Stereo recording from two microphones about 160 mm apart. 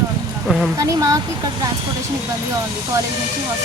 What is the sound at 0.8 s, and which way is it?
Speech, 20° right (ahead or behind).